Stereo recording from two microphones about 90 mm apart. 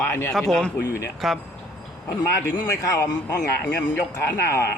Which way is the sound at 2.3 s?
40° left (ahead or behind).